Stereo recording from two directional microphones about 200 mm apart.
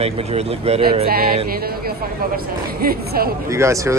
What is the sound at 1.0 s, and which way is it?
Speech, 50° right (ahead or behind).